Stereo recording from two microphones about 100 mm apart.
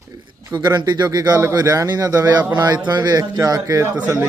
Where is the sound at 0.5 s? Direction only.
50° right (ahead or behind).